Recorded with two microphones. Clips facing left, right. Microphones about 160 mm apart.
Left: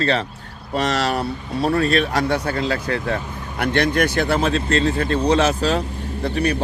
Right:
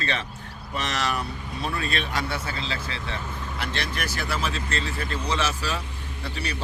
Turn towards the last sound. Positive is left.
turn(degrees=55)  # may be behind; listen again after turning